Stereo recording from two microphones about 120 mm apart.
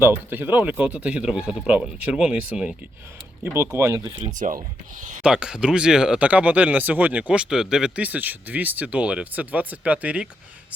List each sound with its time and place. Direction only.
0.0 s speech: 15° right (ahead or behind)
3.4 s speech: 20° right (ahead or behind)
4.4 s speech: 90° right
5.2 s speech: 5° right (ahead or behind)